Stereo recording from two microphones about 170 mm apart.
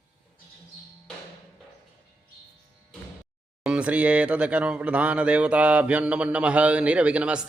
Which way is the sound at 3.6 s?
5° right (ahead or behind).